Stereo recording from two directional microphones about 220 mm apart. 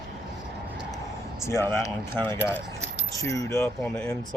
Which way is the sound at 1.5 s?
10° left (ahead or behind).